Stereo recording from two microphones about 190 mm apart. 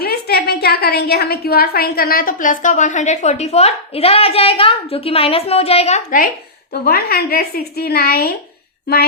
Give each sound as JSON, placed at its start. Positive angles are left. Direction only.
{"t": 0.0, "sound": "a woman's voice", "side_deg": 55}
{"t": 6.8, "sound": "a woman's voice", "side_deg": 50}